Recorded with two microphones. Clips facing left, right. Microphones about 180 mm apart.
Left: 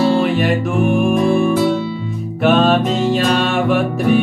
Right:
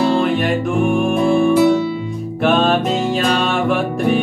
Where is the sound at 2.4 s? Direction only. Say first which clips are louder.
Left 2 dB; centre (ahead or behind).